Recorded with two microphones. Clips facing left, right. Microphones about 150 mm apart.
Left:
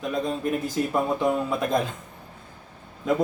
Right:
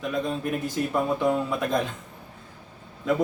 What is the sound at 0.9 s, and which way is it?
Speech, 10° left (ahead or behind).